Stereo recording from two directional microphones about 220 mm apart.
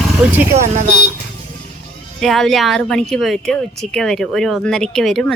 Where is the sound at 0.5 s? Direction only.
30° right (ahead or behind).